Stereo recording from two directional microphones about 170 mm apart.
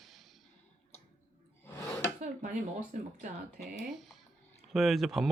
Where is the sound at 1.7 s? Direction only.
15° left (ahead or behind).